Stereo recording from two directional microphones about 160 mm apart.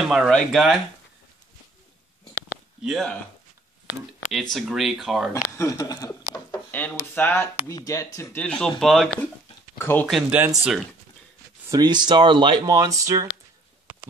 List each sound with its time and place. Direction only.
0.0 s speech: centre (ahead or behind)
2.8 s speech: centre (ahead or behind)
4.3 s speech: centre (ahead or behind)
5.6 s speech: 20° left (ahead or behind)
8.4 s speech: 5° left (ahead or behind)
9.8 s speech: 15° left (ahead or behind)
10.0 s speech: centre (ahead or behind)
11.7 s speech: 25° right (ahead or behind)